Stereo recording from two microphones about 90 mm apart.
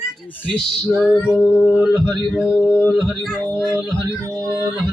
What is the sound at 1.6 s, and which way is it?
Speech, 20° right (ahead or behind).